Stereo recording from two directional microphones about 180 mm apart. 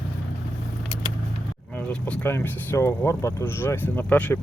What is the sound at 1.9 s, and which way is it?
Speech, 5° left (ahead or behind).